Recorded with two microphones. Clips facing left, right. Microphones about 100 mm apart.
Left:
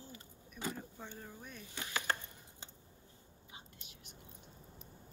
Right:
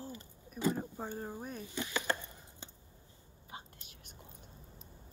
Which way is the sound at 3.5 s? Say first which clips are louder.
Right 7 dB; 45° right (ahead or behind).